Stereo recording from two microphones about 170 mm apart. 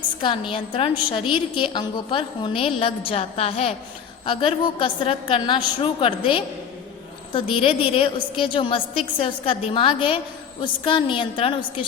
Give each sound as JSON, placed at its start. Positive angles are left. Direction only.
{"t": 0.2, "sound": "a woman's voice", "side_deg": 30}